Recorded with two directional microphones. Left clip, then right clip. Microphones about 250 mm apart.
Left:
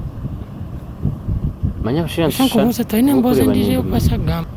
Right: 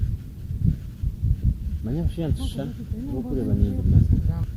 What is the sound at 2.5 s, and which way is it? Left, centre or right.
Speech, left.